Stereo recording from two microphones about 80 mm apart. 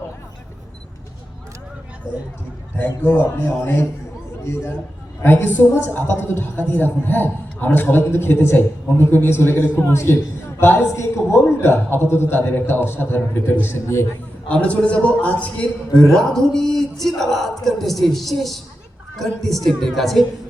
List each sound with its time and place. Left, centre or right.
2.7 s a woman's voice: left
5.2 s a woman's voice: left
14.4 s a man's voice: centre
16.0 s speech: centre